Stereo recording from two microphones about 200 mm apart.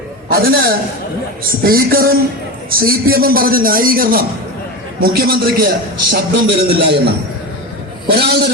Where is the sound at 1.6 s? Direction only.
50° right (ahead or behind).